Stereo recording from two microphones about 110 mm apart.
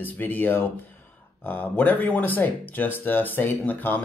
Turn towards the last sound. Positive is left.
turn(degrees=15)  # may be behind; listen again after turning